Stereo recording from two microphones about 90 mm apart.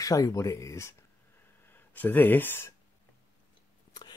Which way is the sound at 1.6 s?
20° left (ahead or behind).